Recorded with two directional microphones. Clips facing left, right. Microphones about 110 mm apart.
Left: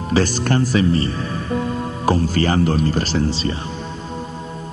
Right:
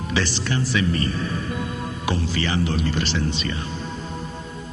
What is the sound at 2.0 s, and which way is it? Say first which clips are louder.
Speech: left 8 dB; 45° left (ahead or behind).